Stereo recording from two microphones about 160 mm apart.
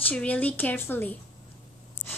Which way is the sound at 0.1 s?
10° left (ahead or behind).